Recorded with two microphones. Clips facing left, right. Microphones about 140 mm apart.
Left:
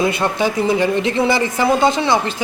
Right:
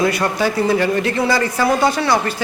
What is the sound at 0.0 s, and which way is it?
Speech, 25° left (ahead or behind).